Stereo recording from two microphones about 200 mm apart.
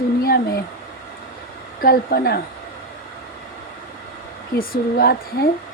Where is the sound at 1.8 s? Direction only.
50° left (ahead or behind).